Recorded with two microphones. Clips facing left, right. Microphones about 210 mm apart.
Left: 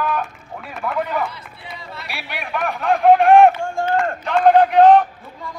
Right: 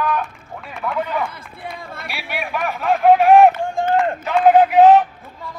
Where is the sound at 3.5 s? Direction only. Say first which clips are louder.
Right 1 dB; 15° right (ahead or behind).